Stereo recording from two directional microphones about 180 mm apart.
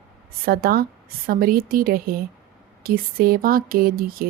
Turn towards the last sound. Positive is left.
turn(degrees=-55)  # may be behind; listen again after turning